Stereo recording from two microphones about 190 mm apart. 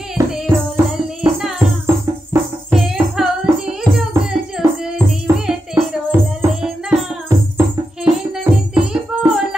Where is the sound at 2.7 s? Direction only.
Centre (ahead or behind).